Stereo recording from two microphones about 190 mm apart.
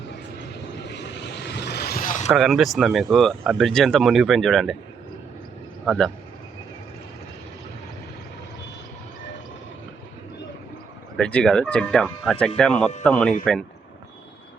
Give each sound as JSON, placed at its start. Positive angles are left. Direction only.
{"t": 0.9, "sound": "vehicle", "side_deg": 65}
{"t": 2.3, "sound": "speech", "side_deg": 0}
{"t": 5.8, "sound": "speech", "side_deg": -5}
{"t": 11.2, "sound": "speech", "side_deg": 5}